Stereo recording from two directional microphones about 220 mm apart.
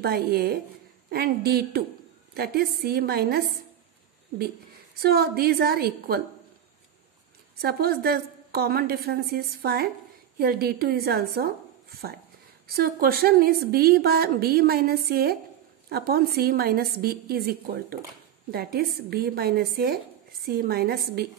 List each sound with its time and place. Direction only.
0.0 s a woman's voice: 45° right (ahead or behind)
5.0 s a woman's voice: 45° right (ahead or behind)
7.6 s a woman's voice: 45° right (ahead or behind)